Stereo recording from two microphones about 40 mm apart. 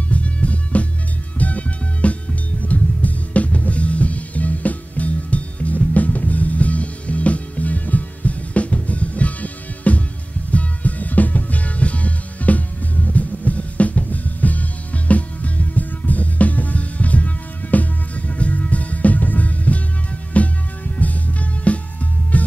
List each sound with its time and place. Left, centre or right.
0.1 s music: left